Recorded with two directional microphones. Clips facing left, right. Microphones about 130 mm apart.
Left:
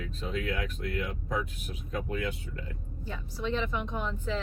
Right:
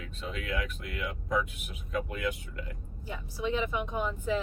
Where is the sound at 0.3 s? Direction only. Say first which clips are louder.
Left 2 dB; 35° left (ahead or behind).